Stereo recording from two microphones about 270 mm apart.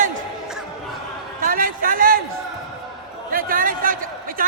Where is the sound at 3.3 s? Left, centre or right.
Right.